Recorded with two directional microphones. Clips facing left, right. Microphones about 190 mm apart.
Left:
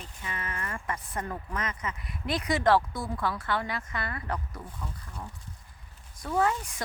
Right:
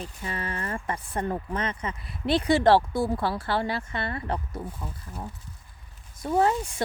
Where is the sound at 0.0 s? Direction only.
35° right (ahead or behind).